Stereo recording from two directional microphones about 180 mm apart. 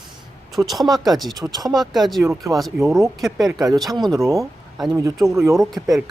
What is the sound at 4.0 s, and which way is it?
Speech, 25° right (ahead or behind).